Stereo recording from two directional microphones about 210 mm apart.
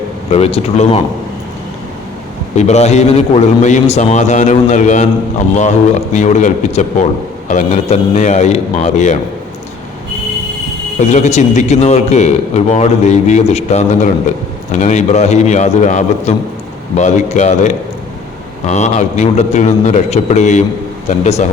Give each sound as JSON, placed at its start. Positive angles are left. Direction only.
{"t": 0.3, "sound": "speech", "side_deg": 30}
{"t": 2.6, "sound": "a man's voice", "side_deg": 30}
{"t": 11.1, "sound": "a man's voice", "side_deg": 35}